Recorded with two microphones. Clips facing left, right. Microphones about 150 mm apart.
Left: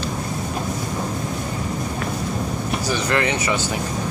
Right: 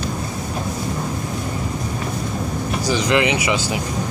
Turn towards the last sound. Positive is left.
turn(degrees=-15)  # may be behind; listen again after turning